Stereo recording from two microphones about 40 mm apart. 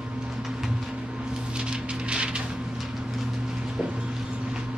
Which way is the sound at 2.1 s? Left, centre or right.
Right.